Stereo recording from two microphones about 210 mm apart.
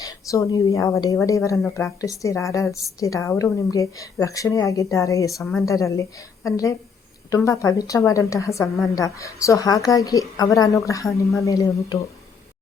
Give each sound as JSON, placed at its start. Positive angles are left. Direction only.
{"t": 0.0, "sound": "a woman's voice", "side_deg": 15}